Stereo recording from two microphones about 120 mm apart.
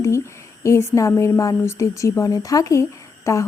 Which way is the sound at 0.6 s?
25° left (ahead or behind).